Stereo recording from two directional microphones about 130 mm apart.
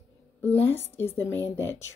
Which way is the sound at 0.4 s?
15° left (ahead or behind).